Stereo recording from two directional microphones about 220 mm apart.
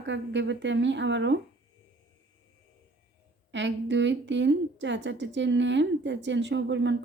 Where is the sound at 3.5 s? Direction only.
55° right (ahead or behind).